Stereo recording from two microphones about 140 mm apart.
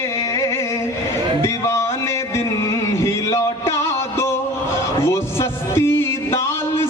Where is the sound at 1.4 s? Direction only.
20° left (ahead or behind).